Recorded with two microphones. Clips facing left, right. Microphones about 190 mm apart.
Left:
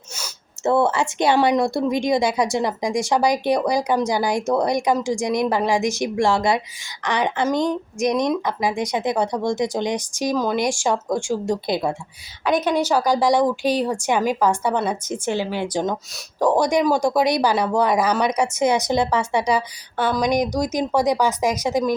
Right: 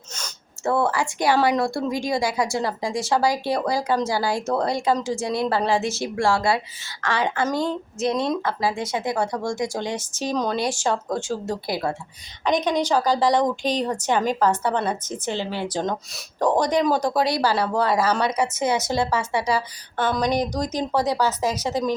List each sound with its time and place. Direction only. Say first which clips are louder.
0.6 s a woman's voice: left 3 dB; 25° left (ahead or behind)
12.5 s a woman's voice: left 2 dB; 5° left (ahead or behind)